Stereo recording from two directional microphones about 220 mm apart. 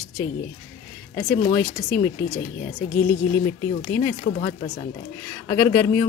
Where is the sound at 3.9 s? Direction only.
10° left (ahead or behind).